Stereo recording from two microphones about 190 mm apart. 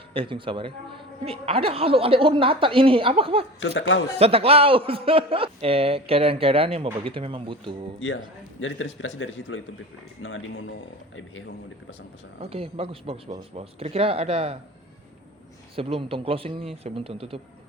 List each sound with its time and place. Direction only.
0.1 s speech: 25° right (ahead or behind)
3.8 s a man's voice: 85° left
4.2 s speech: 30° right (ahead or behind)
8.6 s a man's voice: 90° left
10.2 s speech: 70° left (ahead or behind)
12.4 s speech: 30° right (ahead or behind)
15.7 s speech: 30° right (ahead or behind)